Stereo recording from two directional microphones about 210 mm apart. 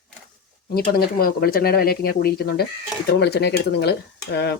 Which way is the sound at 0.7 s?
45° left (ahead or behind).